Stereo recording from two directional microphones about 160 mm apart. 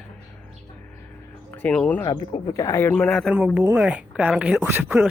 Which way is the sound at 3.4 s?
10° right (ahead or behind).